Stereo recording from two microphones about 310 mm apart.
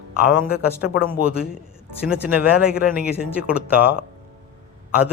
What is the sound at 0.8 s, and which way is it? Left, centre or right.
Speech, centre.